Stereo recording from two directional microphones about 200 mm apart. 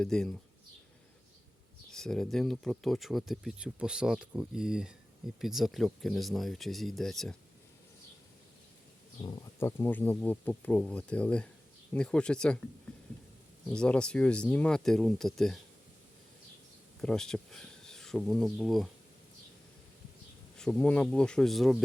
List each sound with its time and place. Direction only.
0.0 s speech: 5° left (ahead or behind)
1.9 s speech: 5° left (ahead or behind)
9.2 s speech: 15° left (ahead or behind)
13.7 s speech: 5° left (ahead or behind)
17.0 s speech: 5° left (ahead or behind)
20.6 s speech: 5° left (ahead or behind)